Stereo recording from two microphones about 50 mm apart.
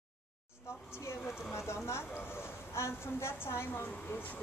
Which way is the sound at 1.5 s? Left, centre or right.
Left.